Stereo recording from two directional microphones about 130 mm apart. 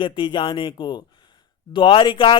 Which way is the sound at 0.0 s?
40° left (ahead or behind).